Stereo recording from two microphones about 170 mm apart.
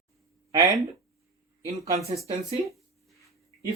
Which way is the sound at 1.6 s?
40° right (ahead or behind).